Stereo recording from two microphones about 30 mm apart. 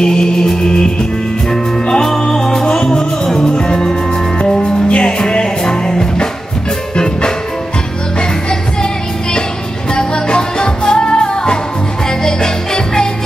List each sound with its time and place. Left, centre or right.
0.0 s music: left
4.8 s music: left
5.2 s music: left
9.9 s music: left